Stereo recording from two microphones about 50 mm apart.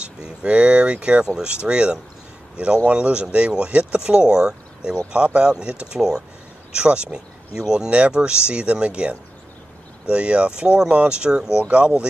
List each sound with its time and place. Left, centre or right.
0.0 s speech: right